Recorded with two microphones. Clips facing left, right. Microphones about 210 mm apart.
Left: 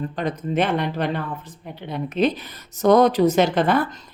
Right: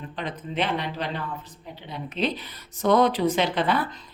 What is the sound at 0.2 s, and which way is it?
Speech, 45° left (ahead or behind).